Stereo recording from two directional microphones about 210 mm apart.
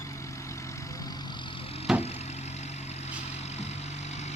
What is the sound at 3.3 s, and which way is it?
Vehicle, 30° left (ahead or behind).